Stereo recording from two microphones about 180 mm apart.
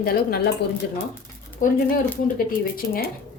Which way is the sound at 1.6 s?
45° left (ahead or behind).